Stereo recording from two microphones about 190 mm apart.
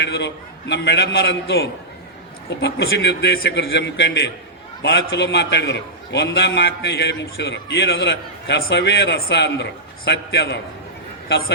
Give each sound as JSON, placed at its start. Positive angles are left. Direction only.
{"t": 0.0, "sound": "a man's voice", "side_deg": 65}